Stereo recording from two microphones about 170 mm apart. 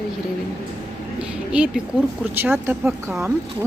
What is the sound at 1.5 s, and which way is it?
Speech, 5° right (ahead or behind).